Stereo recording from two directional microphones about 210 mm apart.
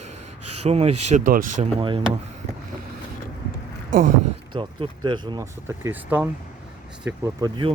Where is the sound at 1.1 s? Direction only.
40° right (ahead or behind).